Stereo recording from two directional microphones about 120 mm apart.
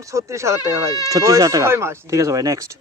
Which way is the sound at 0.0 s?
25° right (ahead or behind).